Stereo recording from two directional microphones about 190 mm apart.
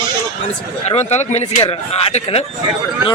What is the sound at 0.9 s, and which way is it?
Speech, 35° left (ahead or behind).